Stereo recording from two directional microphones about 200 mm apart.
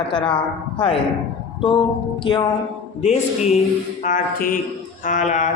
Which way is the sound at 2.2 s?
25° left (ahead or behind).